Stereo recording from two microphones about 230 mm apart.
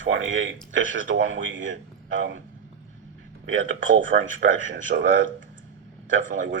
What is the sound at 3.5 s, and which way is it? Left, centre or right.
Speech, right.